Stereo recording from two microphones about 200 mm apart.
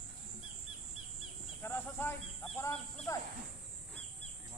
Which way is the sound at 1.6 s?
10° left (ahead or behind).